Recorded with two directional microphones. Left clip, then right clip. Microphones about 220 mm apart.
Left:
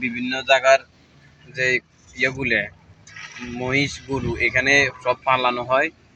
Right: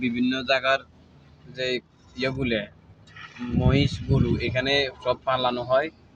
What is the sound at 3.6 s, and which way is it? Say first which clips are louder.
Speech: left 4 dB; 5° right (ahead or behind).